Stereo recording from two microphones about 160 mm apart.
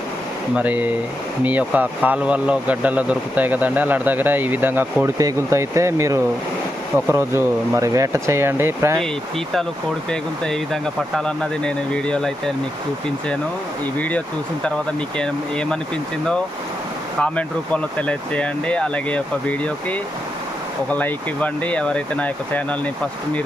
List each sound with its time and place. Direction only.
0.5 s speech: 10° right (ahead or behind)
10.1 s speech: 5° left (ahead or behind)
15.2 s speech: 5° left (ahead or behind)
17.9 s speech: 10° left (ahead or behind)